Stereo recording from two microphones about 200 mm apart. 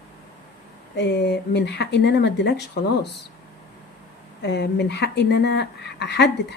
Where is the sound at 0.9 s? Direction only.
55° left (ahead or behind).